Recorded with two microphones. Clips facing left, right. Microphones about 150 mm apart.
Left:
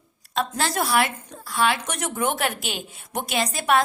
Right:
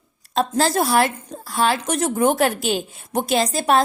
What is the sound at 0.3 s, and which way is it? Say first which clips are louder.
A woman's voice: right 6 dB; 35° right (ahead or behind).